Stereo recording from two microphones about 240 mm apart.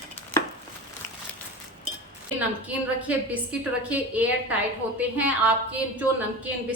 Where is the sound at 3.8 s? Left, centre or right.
Centre.